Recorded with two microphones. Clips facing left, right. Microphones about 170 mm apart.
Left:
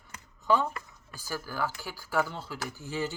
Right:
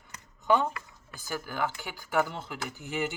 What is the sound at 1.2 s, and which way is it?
Speech, 20° right (ahead or behind).